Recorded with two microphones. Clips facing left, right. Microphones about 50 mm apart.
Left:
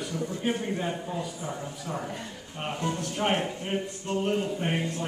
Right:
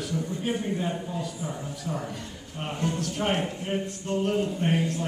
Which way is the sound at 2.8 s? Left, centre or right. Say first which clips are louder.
Right 1 dB; centre.